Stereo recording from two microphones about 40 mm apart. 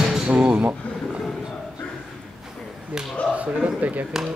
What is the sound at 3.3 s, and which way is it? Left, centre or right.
Speech, right.